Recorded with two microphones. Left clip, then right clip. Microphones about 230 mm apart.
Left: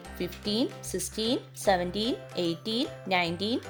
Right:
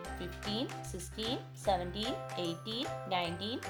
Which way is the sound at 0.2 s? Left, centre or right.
Left.